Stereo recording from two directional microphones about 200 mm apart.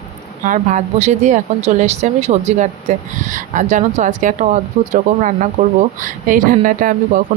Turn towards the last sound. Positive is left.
turn(degrees=-45)  # may be behind; listen again after turning